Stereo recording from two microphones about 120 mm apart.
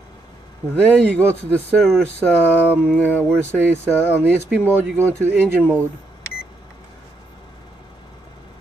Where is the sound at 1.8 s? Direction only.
Centre (ahead or behind).